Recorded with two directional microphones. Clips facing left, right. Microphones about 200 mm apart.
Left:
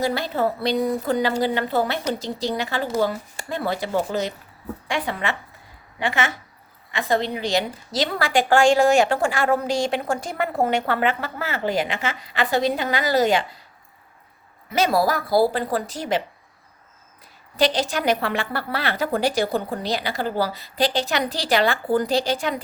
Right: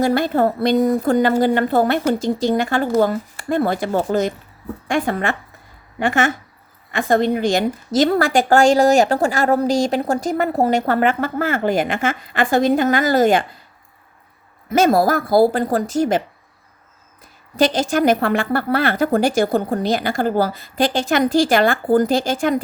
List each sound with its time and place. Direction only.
0.0 s a woman's voice: 50° right (ahead or behind)
14.7 s a woman's voice: 45° right (ahead or behind)
17.6 s a woman's voice: 45° right (ahead or behind)